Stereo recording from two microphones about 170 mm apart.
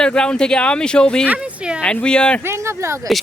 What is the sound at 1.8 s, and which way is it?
Speech, 5° left (ahead or behind).